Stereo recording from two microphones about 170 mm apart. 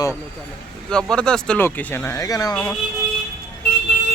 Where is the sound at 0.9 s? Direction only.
5° left (ahead or behind); by 2.7 s 20° left (ahead or behind).